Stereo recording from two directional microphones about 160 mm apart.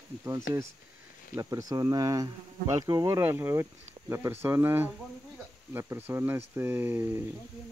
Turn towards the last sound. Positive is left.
turn(degrees=-15)  # may be behind; listen again after turning